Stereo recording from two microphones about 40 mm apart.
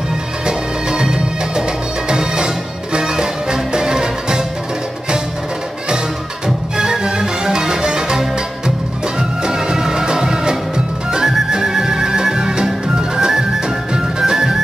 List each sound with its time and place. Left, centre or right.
0.5 s music: centre
6.4 s music: centre